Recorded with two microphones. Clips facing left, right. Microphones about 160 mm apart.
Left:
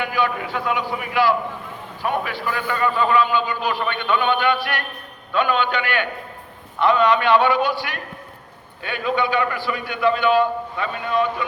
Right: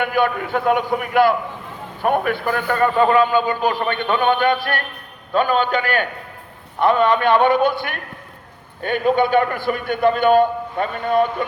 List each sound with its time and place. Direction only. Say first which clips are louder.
0.0 s a man's voice: right 4 dB; 50° right (ahead or behind)